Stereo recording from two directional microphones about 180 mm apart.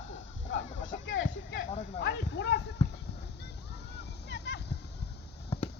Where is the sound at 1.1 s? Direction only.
90° left.